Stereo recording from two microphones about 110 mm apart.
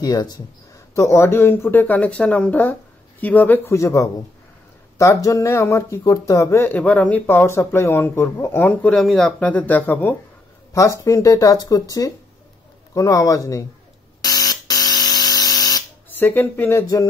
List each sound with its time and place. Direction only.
0.0 s speech: 40° left (ahead or behind)
0.9 s speech: 25° left (ahead or behind)
8.9 s speech: 5° left (ahead or behind)
10.7 s speech: 30° left (ahead or behind)
14.2 s a sound: 35° left (ahead or behind)
16.2 s speech: 20° left (ahead or behind)